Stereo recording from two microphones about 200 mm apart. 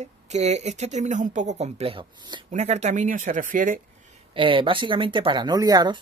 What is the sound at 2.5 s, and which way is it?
A woman's voice, 35° right (ahead or behind).